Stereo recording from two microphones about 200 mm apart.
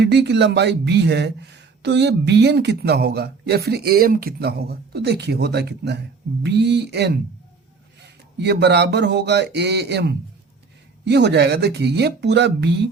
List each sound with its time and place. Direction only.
0.0 s speech: 55° right (ahead or behind)